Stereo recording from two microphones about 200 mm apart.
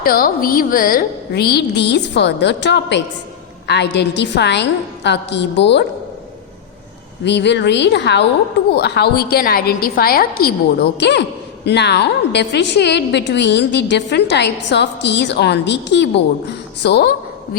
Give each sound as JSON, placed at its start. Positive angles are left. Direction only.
{"t": 0.0, "sound": "a woman's voice", "side_deg": 45}
{"t": 7.3, "sound": "a woman's voice", "side_deg": 60}